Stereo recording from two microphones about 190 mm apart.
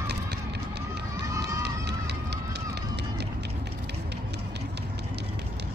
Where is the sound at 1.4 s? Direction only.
60° right (ahead or behind).